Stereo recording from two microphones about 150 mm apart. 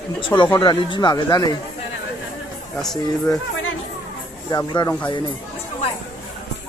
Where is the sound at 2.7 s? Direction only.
5° left (ahead or behind).